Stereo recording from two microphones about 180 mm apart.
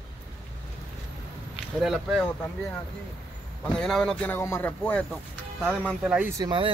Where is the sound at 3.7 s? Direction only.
Centre (ahead or behind).